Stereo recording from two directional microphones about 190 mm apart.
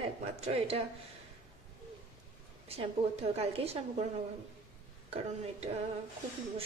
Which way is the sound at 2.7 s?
30° right (ahead or behind).